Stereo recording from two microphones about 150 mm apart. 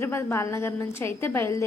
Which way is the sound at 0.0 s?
15° left (ahead or behind).